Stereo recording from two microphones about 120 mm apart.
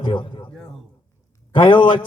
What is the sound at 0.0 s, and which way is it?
Music, 40° left (ahead or behind).